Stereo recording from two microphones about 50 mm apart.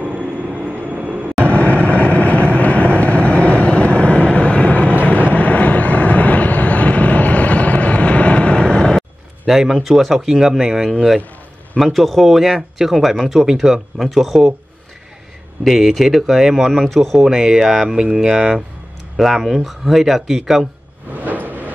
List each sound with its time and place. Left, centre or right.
1.4 s vehicle: left
9.5 s speech: centre
15.6 s speech: centre
16.7 s speech: centre
17.3 s speech: centre
19.1 s speech: centre
21.2 s a sound: right